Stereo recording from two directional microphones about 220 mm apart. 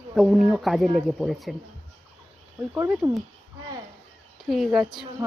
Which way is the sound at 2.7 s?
5° right (ahead or behind).